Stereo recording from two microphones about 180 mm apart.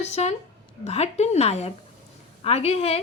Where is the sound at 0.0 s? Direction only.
35° left (ahead or behind).